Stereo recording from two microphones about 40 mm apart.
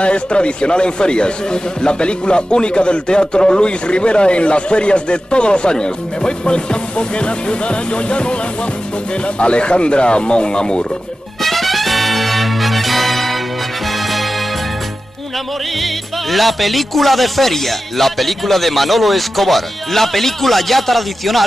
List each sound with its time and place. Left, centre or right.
0.0 s speech: left
11.4 s music: centre
15.8 s speech: centre